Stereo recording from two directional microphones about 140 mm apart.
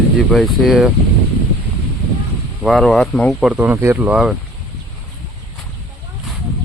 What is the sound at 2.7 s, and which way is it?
Speech, centre (ahead or behind).